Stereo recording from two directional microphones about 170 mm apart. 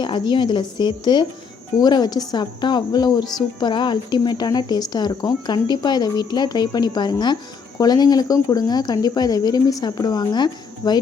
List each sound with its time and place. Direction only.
0.0 s a woman's voice: 25° left (ahead or behind)